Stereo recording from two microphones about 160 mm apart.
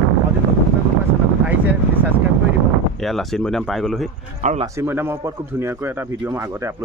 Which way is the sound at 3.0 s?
Centre (ahead or behind).